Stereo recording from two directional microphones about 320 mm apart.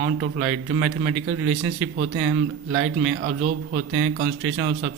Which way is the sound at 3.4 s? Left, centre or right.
Right.